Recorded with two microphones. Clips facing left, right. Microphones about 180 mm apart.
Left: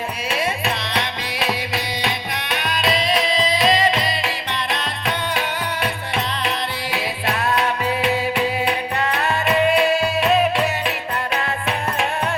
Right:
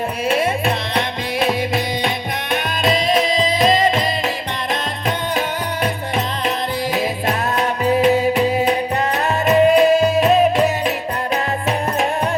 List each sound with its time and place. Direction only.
0.3 s music: 50° right (ahead or behind)
6.9 s music: 40° right (ahead or behind)